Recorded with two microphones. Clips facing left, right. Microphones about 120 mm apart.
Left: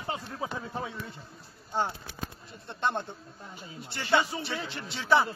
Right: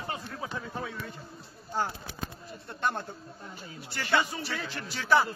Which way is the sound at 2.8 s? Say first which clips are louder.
Left 1 dB; 25° left (ahead or behind).